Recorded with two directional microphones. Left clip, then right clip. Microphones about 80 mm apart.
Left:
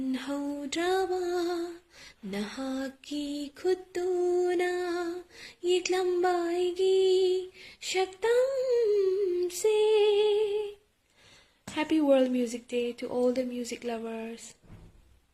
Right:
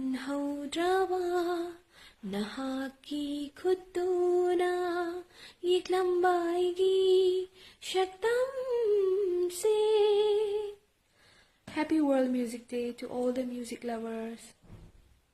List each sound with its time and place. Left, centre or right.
0.1 s a sound: right
3.6 s female singing: right
11.8 s speech: right
13.7 s speech: right